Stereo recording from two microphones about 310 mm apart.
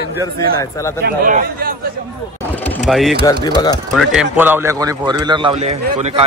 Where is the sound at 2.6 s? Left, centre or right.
Centre.